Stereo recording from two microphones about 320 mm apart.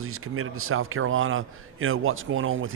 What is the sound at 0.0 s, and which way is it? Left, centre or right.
A man's voice, right.